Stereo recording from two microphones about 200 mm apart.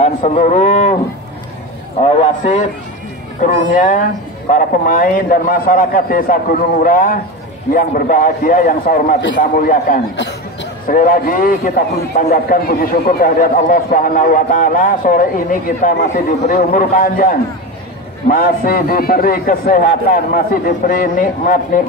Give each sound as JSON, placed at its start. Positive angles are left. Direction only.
{"t": 0.0, "sound": "speech", "side_deg": 35}
{"t": 2.0, "sound": "speech", "side_deg": 35}
{"t": 3.7, "sound": "a man's voice", "side_deg": 40}
{"t": 10.1, "sound": "chatter", "side_deg": 60}
{"t": 10.9, "sound": "a man's voice", "side_deg": 45}